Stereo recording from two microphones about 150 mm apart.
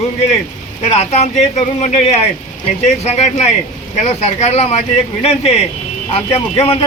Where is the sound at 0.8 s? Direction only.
45° left (ahead or behind).